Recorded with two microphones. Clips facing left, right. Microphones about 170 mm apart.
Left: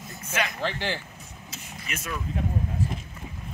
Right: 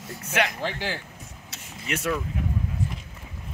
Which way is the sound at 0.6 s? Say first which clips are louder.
Left 1 dB; 10° right (ahead or behind).